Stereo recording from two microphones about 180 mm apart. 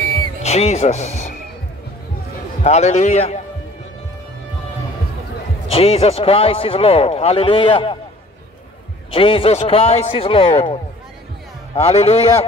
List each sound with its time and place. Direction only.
0.4 s speech: 35° left (ahead or behind)
2.6 s speech: 40° left (ahead or behind)
5.7 s speech: 35° left (ahead or behind)
9.1 s speech: 30° left (ahead or behind)